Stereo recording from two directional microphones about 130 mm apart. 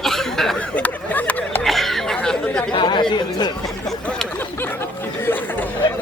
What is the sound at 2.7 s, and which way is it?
Speech, 35° left (ahead or behind).